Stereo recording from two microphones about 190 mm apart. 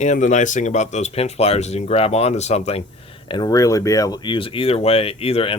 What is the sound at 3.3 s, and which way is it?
Speech, 20° left (ahead or behind).